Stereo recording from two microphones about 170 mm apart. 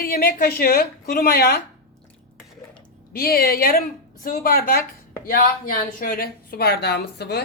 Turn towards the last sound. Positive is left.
turn(degrees=75)  # may be behind; listen again after turning